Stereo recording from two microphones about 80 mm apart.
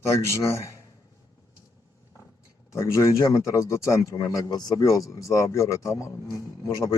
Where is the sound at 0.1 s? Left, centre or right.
Left.